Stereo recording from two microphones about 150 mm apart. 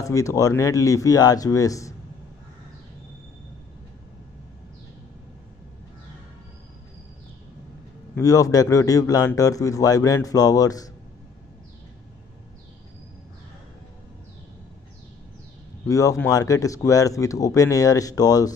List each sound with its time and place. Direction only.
0.0 s a man's voice: 20° left (ahead or behind)
8.2 s a man's voice: 25° left (ahead or behind)
15.9 s a man's voice: 20° left (ahead or behind)